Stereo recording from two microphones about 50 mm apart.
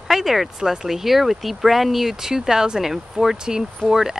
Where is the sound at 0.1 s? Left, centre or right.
Centre.